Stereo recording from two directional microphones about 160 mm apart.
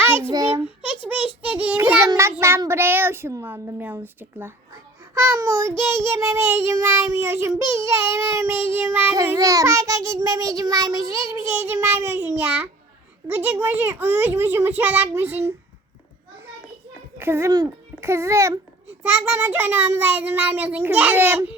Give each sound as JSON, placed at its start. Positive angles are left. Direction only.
{"t": 0.3, "sound": "child singing", "side_deg": -20}
{"t": 0.9, "sound": "a child's voice", "side_deg": -10}
{"t": 1.4, "sound": "child singing", "side_deg": -10}
{"t": 17.2, "sound": "child singing", "side_deg": -15}